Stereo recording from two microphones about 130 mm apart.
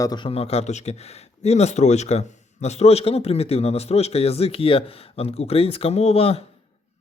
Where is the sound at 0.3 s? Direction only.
50° left (ahead or behind).